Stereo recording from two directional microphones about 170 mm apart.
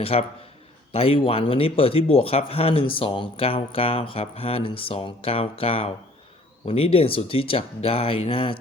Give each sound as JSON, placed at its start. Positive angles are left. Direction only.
{"t": 0.0, "sound": "speech", "side_deg": 35}